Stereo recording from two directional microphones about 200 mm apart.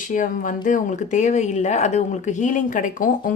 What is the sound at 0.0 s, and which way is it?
Speech, 40° left (ahead or behind).